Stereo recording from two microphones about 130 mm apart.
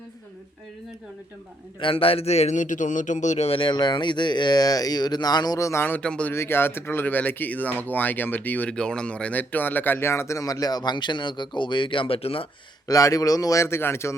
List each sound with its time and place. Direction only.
1.8 s a man's voice: 45° left (ahead or behind); by 6.3 s 10° left (ahead or behind)
6.3 s speech: 20° left (ahead or behind); by 12.5 s 45° left (ahead or behind)
12.9 s speech: 25° left (ahead or behind)